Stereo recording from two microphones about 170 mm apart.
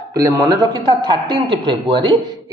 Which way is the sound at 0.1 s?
20° right (ahead or behind).